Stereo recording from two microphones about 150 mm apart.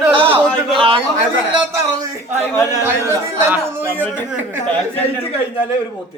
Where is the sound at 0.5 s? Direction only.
35° right (ahead or behind).